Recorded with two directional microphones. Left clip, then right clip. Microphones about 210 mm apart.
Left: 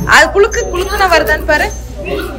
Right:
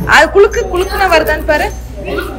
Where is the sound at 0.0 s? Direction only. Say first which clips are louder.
Right 1 dB; 5° right (ahead or behind).